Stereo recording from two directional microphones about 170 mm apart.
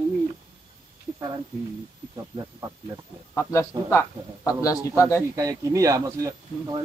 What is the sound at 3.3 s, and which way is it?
A man's voice, 15° left (ahead or behind).